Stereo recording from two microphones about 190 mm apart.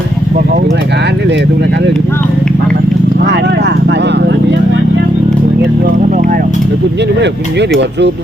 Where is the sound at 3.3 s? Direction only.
60° right (ahead or behind).